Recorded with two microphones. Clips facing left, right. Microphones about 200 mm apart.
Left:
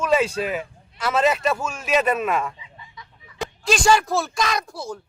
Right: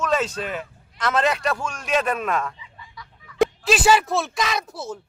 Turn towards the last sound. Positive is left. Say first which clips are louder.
# left 1 dB
turn(degrees=-5)  # may be behind; listen again after turning